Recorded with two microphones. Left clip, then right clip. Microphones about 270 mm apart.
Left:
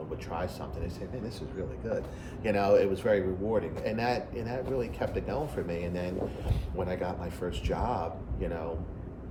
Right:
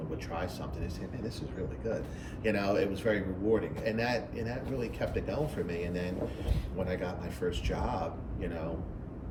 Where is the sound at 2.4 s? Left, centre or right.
Centre.